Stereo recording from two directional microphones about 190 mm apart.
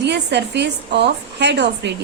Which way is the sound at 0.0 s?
65° right (ahead or behind).